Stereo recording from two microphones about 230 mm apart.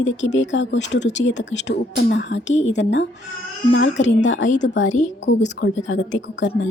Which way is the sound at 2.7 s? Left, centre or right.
Left.